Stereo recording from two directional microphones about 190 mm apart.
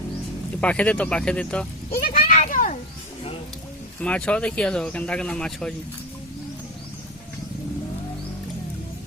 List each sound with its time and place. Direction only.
0.6 s speech: 5° left (ahead or behind)
1.9 s a sound: 50° left (ahead or behind)
4.0 s speech: 5° left (ahead or behind)